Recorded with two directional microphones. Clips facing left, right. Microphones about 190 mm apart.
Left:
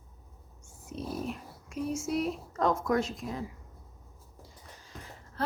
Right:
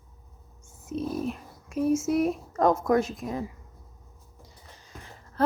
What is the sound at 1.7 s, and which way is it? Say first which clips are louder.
Speech: right 9 dB; 20° right (ahead or behind).